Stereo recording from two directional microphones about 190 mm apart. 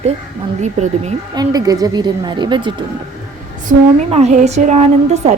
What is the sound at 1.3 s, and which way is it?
A woman's voice, 20° right (ahead or behind).